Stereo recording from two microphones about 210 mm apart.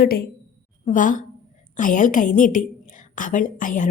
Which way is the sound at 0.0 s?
45° left (ahead or behind).